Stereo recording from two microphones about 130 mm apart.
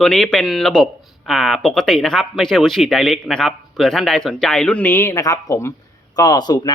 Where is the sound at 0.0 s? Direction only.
5° left (ahead or behind).